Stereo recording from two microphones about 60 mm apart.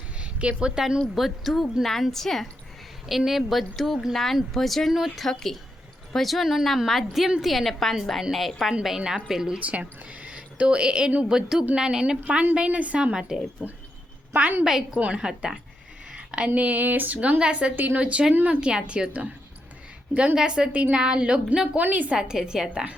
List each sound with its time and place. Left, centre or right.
0.2 s a woman's voice: centre
1.1 s speech: centre
9.0 s speech: centre
9.6 s speech: right; by 14.8 s centre
14.9 s speech: right
16.1 s a sound: centre
16.6 s speech: right
20.3 s speech: centre
21.8 s speech: right
22.1 s speech: centre